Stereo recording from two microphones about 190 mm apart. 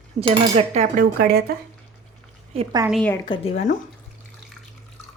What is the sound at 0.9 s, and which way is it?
Speech, 50° right (ahead or behind).